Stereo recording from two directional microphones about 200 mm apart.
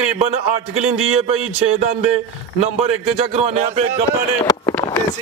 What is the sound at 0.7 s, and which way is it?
Speech, 90° right.